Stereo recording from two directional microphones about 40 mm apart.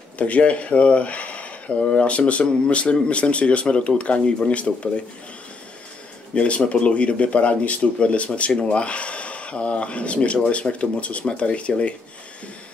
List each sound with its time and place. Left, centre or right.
0.2 s speech: left
6.3 s speech: left